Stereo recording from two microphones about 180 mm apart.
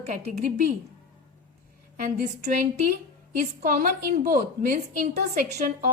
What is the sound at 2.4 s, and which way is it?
Speech, 40° right (ahead or behind).